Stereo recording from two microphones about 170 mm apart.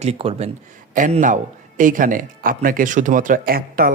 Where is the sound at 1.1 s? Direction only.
50° right (ahead or behind).